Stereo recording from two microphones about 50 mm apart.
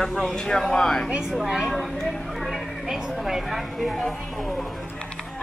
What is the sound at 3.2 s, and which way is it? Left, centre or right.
Speech, centre.